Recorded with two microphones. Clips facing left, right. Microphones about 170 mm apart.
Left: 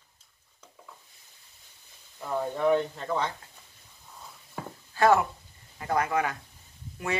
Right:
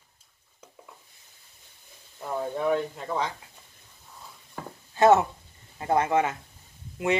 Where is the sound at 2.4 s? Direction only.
10° right (ahead or behind).